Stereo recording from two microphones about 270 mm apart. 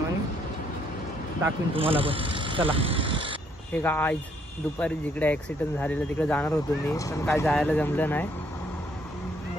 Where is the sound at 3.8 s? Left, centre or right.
Centre.